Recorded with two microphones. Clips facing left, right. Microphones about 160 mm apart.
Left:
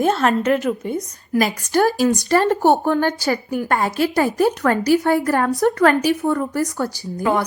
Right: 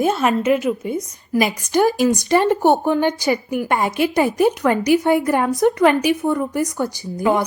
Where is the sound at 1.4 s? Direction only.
15° right (ahead or behind).